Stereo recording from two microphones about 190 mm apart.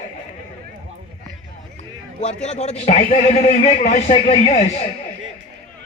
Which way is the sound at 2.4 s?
35° left (ahead or behind).